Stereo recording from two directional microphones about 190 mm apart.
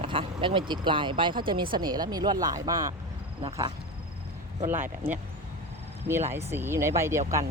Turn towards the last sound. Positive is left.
turn(degrees=-15)  # may be behind; listen again after turning